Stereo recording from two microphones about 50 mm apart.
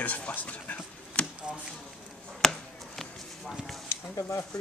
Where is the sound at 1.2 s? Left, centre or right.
Left.